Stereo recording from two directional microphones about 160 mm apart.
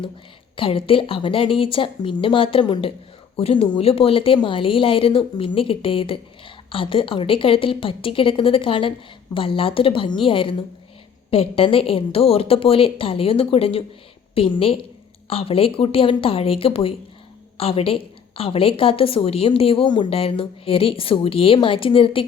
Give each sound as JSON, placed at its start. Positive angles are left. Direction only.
{"t": 0.5, "sound": "a woman's voice", "side_deg": 35}